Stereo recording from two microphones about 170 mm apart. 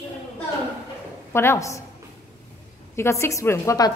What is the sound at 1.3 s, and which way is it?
Speech, 15° left (ahead or behind).